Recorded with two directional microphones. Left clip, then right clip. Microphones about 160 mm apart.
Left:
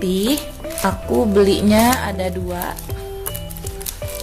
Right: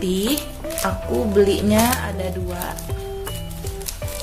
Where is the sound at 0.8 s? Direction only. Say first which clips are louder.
Left 4 dB; 45° left (ahead or behind).